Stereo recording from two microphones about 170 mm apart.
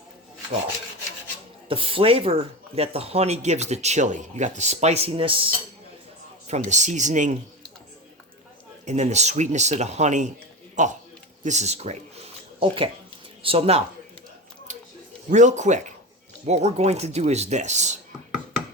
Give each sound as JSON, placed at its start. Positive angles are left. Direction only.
{"t": 1.6, "sound": "speech", "side_deg": -30}
{"t": 6.5, "sound": "speech", "side_deg": -45}
{"t": 8.8, "sound": "speech", "side_deg": -45}
{"t": 14.7, "sound": "a sound", "side_deg": -45}
{"t": 15.3, "sound": "speech", "side_deg": -45}